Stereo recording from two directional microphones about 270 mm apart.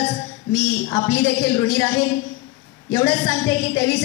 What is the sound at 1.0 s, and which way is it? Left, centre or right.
A woman's voice, centre.